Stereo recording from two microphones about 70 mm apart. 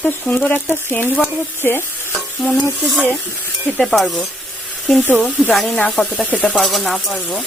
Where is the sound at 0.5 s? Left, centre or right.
Left.